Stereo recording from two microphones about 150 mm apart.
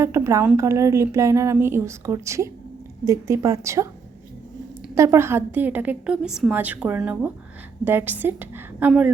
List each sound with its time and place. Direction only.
0.0 s speech: 20° right (ahead or behind)
4.9 s a woman's voice: 20° right (ahead or behind)